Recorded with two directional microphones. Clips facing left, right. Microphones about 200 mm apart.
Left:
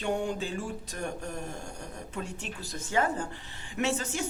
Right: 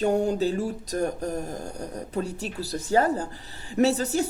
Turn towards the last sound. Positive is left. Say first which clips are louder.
# right 8 dB
turn(degrees=-35)  # may be behind; listen again after turning